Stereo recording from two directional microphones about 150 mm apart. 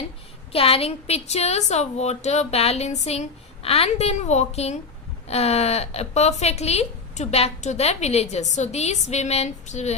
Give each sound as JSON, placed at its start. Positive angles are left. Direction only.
{"t": 0.5, "sound": "speech", "side_deg": 40}